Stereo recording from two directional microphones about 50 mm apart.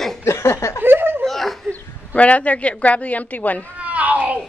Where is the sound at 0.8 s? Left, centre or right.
Right.